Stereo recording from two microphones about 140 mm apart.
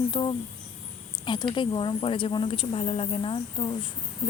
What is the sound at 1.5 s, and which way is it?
A woman's voice, 35° left (ahead or behind).